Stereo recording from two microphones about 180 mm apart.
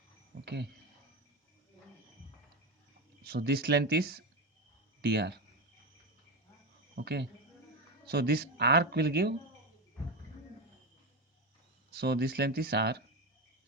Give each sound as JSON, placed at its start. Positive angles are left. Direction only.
{"t": 0.4, "sound": "speech", "side_deg": -65}
{"t": 3.2, "sound": "speech", "side_deg": -65}
{"t": 6.9, "sound": "speech", "side_deg": -65}
{"t": 11.9, "sound": "speech", "side_deg": -65}